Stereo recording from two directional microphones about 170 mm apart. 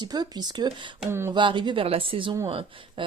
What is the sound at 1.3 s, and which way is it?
Speech, 30° right (ahead or behind).